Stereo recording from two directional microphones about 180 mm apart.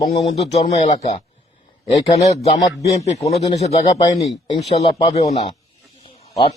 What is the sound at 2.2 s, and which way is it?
Speech, 35° left (ahead or behind).